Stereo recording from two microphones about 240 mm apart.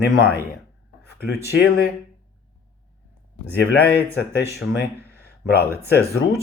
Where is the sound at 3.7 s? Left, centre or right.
Left.